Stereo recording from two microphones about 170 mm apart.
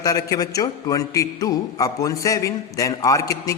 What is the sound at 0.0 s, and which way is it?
A man's voice, 20° left (ahead or behind).